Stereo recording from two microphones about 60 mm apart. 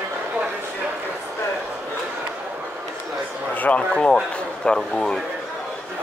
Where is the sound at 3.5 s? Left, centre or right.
Left.